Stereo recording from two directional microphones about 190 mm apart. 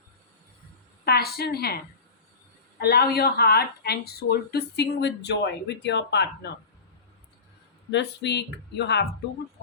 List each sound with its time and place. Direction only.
1.0 s a woman's voice: 55° left (ahead or behind)
7.9 s a woman's voice: 65° left (ahead or behind)